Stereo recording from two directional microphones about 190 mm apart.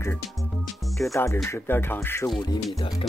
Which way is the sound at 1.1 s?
15° left (ahead or behind).